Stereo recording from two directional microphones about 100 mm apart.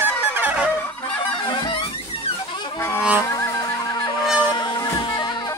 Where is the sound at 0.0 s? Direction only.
20° right (ahead or behind).